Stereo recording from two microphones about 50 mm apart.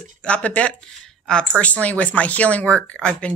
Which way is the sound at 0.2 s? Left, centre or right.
Left.